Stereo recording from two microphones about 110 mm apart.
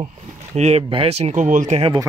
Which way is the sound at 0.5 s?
85° right.